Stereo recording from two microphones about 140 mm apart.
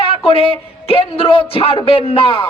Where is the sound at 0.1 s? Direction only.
40° left (ahead or behind).